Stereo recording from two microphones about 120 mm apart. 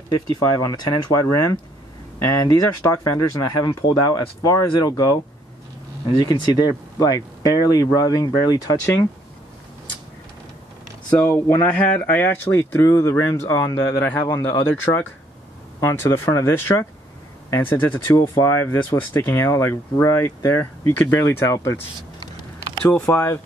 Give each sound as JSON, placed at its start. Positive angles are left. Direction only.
{"t": 0.7, "sound": "speech", "side_deg": 30}
{"t": 6.1, "sound": "speech", "side_deg": 35}
{"t": 11.2, "sound": "speech", "side_deg": 20}
{"t": 22.8, "sound": "speech", "side_deg": 20}